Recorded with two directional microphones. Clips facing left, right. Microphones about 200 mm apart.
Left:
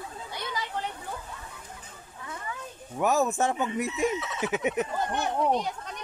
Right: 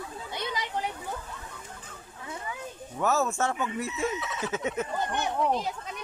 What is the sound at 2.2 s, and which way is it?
Children playing, 20° right (ahead or behind).